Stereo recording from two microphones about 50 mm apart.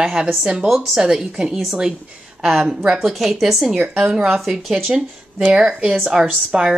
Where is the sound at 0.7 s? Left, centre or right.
Centre.